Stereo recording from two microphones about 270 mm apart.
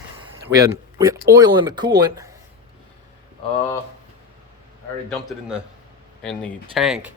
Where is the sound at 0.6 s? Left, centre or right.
Centre.